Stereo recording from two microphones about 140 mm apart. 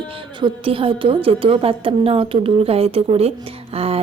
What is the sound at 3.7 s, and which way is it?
Music, 45° right (ahead or behind).